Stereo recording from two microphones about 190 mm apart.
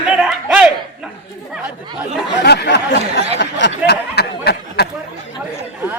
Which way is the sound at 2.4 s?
60° left (ahead or behind).